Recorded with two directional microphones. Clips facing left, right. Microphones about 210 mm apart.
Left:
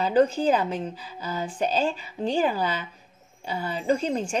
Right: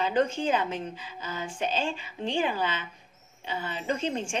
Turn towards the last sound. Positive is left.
turn(degrees=35)  # may be behind; listen again after turning